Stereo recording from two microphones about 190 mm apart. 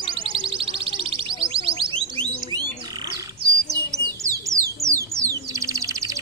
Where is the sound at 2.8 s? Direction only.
20° right (ahead or behind).